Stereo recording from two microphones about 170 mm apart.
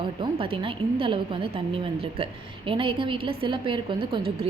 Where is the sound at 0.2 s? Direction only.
30° right (ahead or behind).